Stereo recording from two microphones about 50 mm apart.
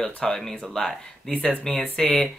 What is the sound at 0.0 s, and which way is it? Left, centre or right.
Speech, centre.